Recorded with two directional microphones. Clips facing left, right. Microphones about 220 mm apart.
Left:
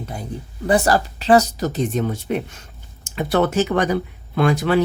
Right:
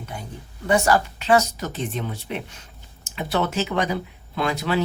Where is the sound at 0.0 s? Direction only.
35° left (ahead or behind).